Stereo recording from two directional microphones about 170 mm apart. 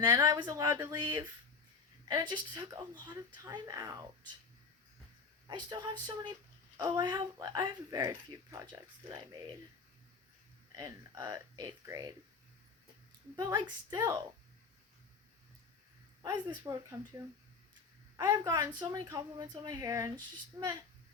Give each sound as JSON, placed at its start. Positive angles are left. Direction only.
{"t": 0.2, "sound": "speech", "side_deg": -25}
{"t": 5.5, "sound": "speech", "side_deg": -25}
{"t": 10.8, "sound": "speech", "side_deg": -20}
{"t": 13.3, "sound": "speech", "side_deg": -25}
{"t": 16.2, "sound": "speech", "side_deg": -25}
{"t": 18.2, "sound": "speech", "side_deg": -20}